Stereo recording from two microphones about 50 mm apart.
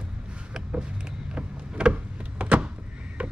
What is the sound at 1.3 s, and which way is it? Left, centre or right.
Power windows, right.